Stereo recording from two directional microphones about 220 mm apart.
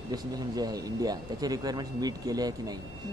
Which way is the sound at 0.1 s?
15° right (ahead or behind).